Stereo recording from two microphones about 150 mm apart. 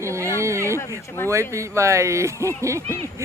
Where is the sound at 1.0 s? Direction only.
20° left (ahead or behind).